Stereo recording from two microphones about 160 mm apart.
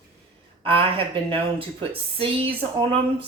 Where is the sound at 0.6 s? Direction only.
35° right (ahead or behind).